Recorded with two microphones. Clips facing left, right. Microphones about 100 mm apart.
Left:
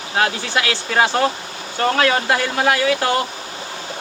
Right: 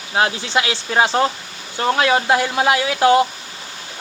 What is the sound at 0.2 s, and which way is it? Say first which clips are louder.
Speech: right 1 dB; 20° right (ahead or behind).